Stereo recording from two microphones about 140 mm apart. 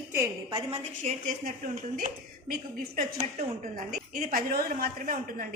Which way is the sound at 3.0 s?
55° right (ahead or behind).